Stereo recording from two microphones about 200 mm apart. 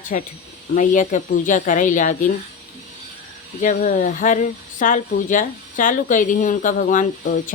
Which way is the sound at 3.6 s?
40° left (ahead or behind).